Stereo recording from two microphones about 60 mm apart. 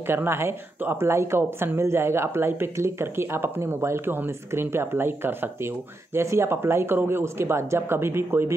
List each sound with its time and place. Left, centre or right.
0.0 s speech: right